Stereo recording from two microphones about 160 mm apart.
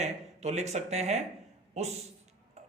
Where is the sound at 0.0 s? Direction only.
45° right (ahead or behind).